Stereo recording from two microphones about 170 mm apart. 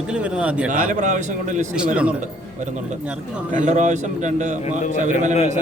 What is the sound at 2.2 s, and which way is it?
A man's voice, 45° right (ahead or behind).